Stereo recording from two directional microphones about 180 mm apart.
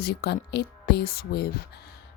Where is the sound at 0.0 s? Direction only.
65° left (ahead or behind).